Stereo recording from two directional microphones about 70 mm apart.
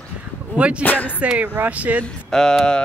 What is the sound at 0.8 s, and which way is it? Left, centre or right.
Speech, left.